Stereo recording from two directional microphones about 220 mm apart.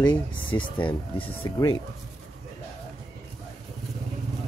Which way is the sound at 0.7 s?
25° left (ahead or behind).